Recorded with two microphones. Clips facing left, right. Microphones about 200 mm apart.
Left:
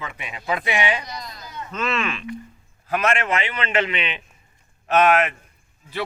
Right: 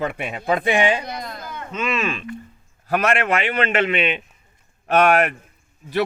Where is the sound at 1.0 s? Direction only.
55° right (ahead or behind).